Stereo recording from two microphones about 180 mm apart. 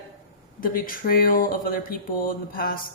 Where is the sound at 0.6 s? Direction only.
50° left (ahead or behind).